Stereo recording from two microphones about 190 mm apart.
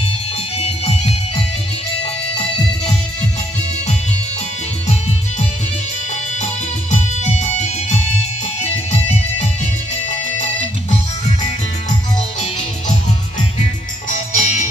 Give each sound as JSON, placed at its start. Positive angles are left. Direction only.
{"t": 0.6, "sound": "music", "side_deg": 30}
{"t": 6.9, "sound": "music", "side_deg": 35}
{"t": 14.0, "sound": "music", "side_deg": 40}